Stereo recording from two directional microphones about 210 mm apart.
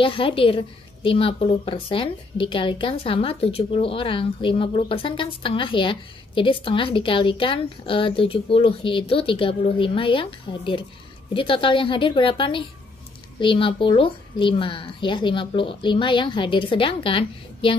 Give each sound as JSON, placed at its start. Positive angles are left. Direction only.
{"t": 0.0, "sound": "a woman's voice", "side_deg": 25}